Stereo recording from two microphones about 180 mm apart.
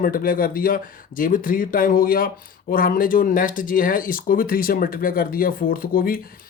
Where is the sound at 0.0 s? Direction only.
55° left (ahead or behind).